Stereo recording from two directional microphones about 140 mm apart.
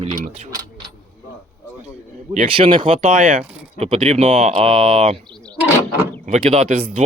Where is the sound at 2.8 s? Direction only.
65° right (ahead or behind).